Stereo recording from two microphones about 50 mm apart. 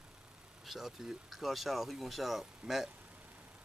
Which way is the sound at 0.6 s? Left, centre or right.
Centre.